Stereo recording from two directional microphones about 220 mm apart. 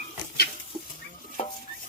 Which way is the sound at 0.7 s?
25° right (ahead or behind).